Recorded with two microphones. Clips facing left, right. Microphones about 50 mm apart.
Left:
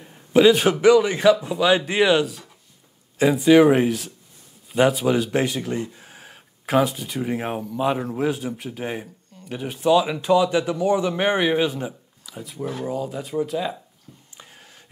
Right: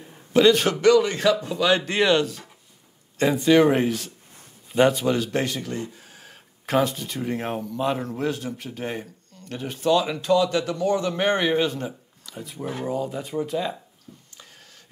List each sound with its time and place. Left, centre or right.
0.0 s speech: centre
6.3 s speech: centre
14.3 s a sound: centre